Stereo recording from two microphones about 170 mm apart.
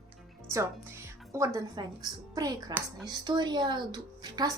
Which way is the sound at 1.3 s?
20° right (ahead or behind).